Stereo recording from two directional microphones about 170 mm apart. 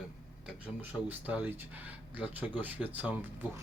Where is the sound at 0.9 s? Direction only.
10° right (ahead or behind).